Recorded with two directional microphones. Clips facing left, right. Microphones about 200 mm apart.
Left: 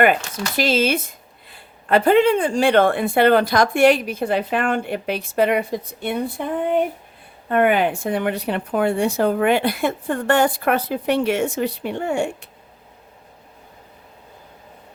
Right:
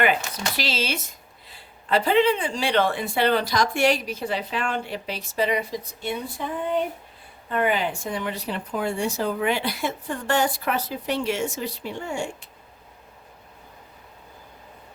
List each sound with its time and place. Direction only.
0.0 s a woman's voice: 50° left (ahead or behind)